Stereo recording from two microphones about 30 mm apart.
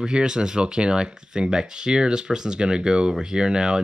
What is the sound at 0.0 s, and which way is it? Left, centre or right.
Speech, right.